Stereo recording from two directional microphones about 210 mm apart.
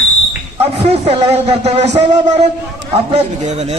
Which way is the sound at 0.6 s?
30° right (ahead or behind).